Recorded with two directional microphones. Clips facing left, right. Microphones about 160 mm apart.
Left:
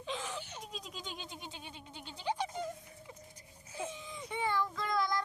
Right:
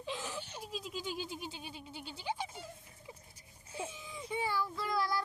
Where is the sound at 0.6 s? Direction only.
5° right (ahead or behind).